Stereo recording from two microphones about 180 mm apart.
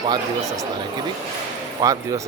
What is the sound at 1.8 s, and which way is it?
Speech, 20° right (ahead or behind).